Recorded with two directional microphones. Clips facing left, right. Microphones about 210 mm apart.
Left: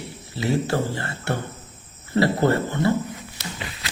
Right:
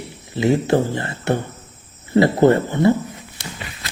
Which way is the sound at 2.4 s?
20° right (ahead or behind).